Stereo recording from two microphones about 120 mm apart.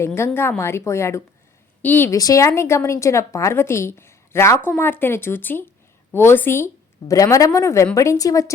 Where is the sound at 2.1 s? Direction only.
30° left (ahead or behind).